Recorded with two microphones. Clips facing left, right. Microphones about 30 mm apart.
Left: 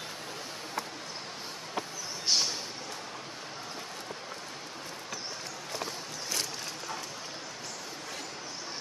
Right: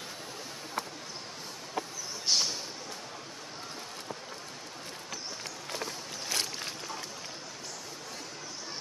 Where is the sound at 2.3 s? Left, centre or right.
Centre.